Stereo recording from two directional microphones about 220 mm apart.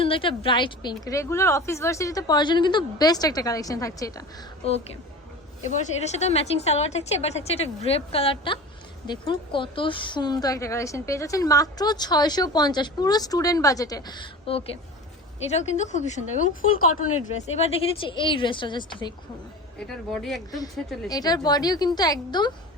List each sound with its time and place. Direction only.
0.0 s a woman's voice: 25° left (ahead or behind)
5.7 s a woman's voice: 30° left (ahead or behind)
20.1 s a woman's voice: centre (ahead or behind)
21.1 s a woman's voice: 15° left (ahead or behind)